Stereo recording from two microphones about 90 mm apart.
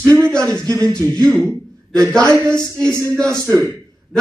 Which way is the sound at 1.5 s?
10° left (ahead or behind).